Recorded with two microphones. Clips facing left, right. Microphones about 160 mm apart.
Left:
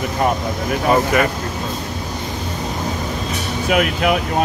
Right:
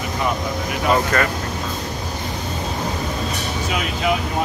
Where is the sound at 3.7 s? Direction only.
60° left (ahead or behind).